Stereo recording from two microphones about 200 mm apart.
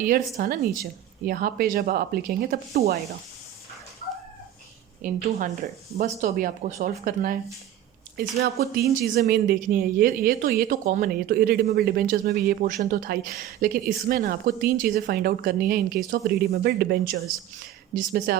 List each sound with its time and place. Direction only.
0.0 s a woman's voice: 45° right (ahead or behind)
5.0 s a woman's voice: 40° right (ahead or behind)